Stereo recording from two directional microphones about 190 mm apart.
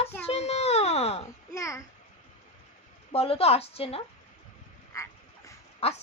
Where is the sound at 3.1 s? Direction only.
30° left (ahead or behind).